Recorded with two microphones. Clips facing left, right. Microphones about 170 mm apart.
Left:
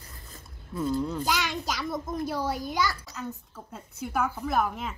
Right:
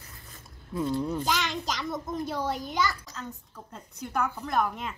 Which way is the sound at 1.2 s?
5° left (ahead or behind).